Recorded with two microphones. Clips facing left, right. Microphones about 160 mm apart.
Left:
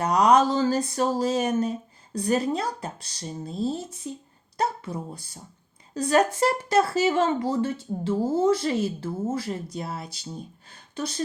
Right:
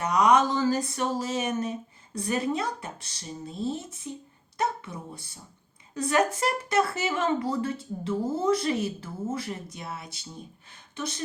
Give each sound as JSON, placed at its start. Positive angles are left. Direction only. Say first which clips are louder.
{"t": 0.0, "sound": "speech", "louder": "left 2 dB", "side_deg": 35}